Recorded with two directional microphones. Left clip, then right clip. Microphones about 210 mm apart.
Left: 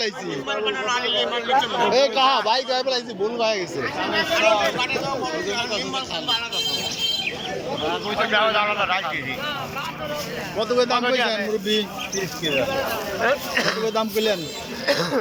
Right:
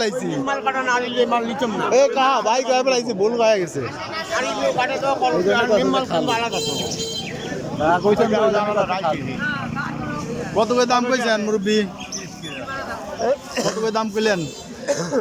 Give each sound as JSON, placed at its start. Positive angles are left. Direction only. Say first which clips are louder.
{"t": 0.4, "sound": "speech", "louder": "right 2 dB", "side_deg": -60}
{"t": 1.9, "sound": "a man's voice", "louder": "right 4 dB", "side_deg": -5}
{"t": 4.4, "sound": "a man's voice", "louder": "even", "side_deg": -40}
{"t": 8.2, "sound": "a man's voice", "louder": "right 2 dB", "side_deg": -25}
{"t": 10.6, "sound": "a man's voice", "louder": "right 3 dB", "side_deg": -10}
{"t": 13.2, "sound": "a man's voice", "louder": "even", "side_deg": -20}
{"t": 13.8, "sound": "a man's voice", "louder": "right 2 dB", "side_deg": -5}